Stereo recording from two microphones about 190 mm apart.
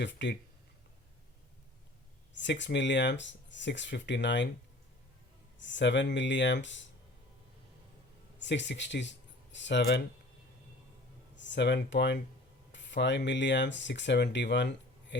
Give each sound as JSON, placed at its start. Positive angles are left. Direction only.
{"t": 0.0, "sound": "speech", "side_deg": 65}
{"t": 2.3, "sound": "speech", "side_deg": 70}
{"t": 5.5, "sound": "speech", "side_deg": 70}
{"t": 8.4, "sound": "speech", "side_deg": 70}
{"t": 11.3, "sound": "speech", "side_deg": 70}